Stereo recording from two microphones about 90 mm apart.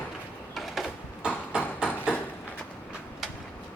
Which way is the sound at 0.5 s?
5° right (ahead or behind).